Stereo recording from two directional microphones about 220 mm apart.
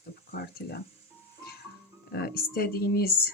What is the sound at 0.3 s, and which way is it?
Speech, 45° left (ahead or behind).